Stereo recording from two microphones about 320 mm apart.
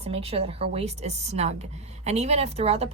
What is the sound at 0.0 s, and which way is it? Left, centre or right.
A woman's voice, centre.